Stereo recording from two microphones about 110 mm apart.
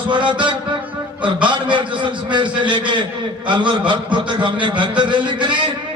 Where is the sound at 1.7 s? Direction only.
45° right (ahead or behind).